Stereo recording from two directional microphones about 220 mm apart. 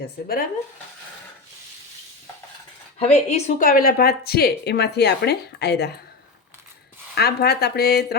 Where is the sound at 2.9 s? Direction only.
30° left (ahead or behind); by 5.9 s 50° left (ahead or behind).